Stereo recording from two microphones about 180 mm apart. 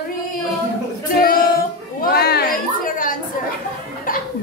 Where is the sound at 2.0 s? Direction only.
60° left (ahead or behind).